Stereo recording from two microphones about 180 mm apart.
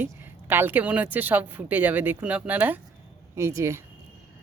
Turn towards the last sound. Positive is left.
turn(degrees=-15)  # may be behind; listen again after turning